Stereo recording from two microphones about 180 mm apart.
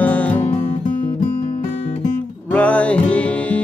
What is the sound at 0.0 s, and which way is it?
Music, 10° left (ahead or behind).